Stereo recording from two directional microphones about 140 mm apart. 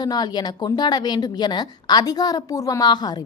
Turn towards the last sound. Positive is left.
turn(degrees=30)  # may be behind; listen again after turning